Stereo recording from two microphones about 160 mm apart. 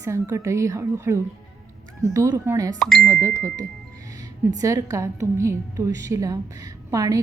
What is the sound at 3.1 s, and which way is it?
A woman's voice, 20° right (ahead or behind).